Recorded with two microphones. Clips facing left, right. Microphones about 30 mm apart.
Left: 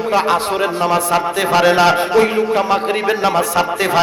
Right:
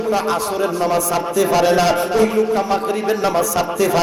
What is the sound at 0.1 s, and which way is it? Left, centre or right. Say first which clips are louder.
A man's voice: left 4 dB; left.